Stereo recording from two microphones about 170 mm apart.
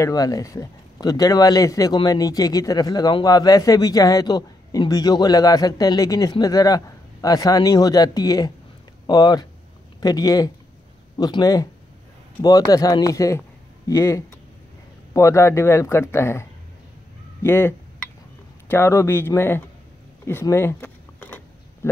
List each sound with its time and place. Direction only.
0.0 s speech: 20° left (ahead or behind)
20.2 s a sound: 15° left (ahead or behind)
21.8 s speech: 15° left (ahead or behind)